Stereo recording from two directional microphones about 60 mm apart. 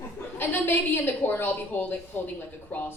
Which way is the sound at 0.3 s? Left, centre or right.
Left.